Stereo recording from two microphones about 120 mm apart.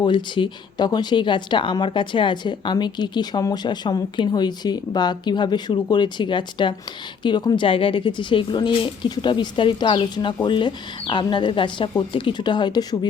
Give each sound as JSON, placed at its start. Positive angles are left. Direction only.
{"t": 0.0, "sound": "a woman's voice", "side_deg": 40}